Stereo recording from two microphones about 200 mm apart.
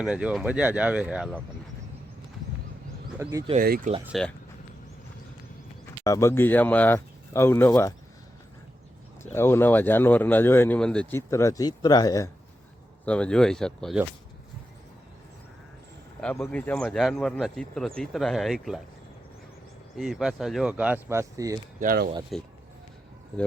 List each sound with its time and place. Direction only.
0.0 s speech: 5° right (ahead or behind)
3.2 s speech: 15° right (ahead or behind)
3.5 s speech: 45° right (ahead or behind)
4.0 s speech: centre (ahead or behind)
6.0 s speech: 15° left (ahead or behind)
9.3 s speech: 10° left (ahead or behind)
13.1 s speech: 5° left (ahead or behind)
16.2 s speech: 5° left (ahead or behind)
20.0 s speech: centre (ahead or behind); by 21.6 s 15° right (ahead or behind)
21.8 s speech: 45° right (ahead or behind)
22.3 s speech: centre (ahead or behind)